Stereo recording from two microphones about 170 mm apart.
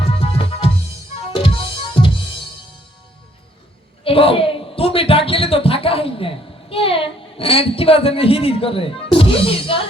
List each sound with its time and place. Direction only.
0.0 s music: 35° left (ahead or behind)
4.0 s speech: 35° left (ahead or behind)